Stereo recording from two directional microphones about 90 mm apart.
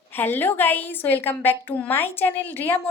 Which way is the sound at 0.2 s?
20° left (ahead or behind).